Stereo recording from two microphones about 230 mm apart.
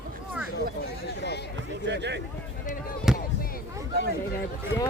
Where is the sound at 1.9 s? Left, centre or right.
Right.